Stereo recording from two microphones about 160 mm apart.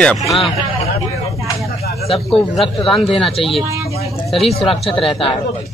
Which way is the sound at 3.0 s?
35° left (ahead or behind).